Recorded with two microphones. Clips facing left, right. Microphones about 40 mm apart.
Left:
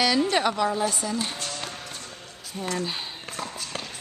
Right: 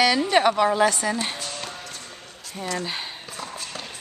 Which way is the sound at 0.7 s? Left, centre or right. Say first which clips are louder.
Right 6 dB; right.